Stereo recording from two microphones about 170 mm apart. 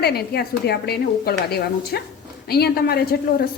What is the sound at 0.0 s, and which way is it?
A woman's voice, 70° left (ahead or behind).